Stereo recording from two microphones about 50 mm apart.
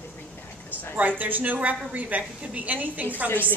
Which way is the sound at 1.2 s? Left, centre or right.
Right.